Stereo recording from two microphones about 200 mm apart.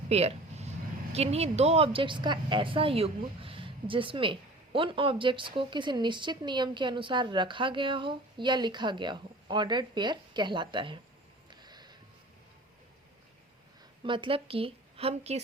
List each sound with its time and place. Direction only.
0.1 s vehicle: 30° right (ahead or behind)
1.1 s speech: 30° right (ahead or behind)
11.5 s a sound: 20° right (ahead or behind)
14.0 s a woman's voice: 25° right (ahead or behind)